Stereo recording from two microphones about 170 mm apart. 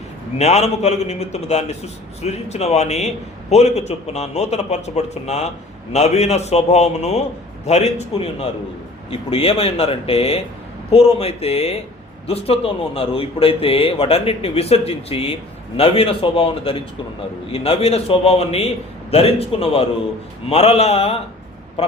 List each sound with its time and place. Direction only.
0.3 s speech: 40° left (ahead or behind)